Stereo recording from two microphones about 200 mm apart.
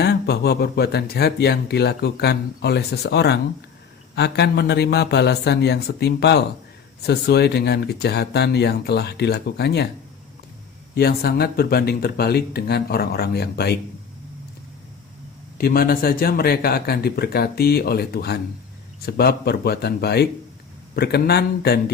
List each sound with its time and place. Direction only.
0.0 s speech: 55° left (ahead or behind)
10.9 s speech: 50° left (ahead or behind)
15.5 s speech: 50° left (ahead or behind)